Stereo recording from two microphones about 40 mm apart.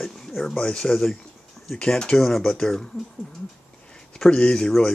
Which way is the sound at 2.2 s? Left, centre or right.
Centre.